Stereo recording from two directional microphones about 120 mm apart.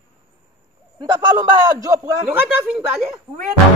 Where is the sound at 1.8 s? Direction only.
30° right (ahead or behind).